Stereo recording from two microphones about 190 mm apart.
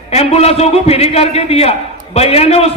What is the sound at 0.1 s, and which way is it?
A man's voice, 35° left (ahead or behind).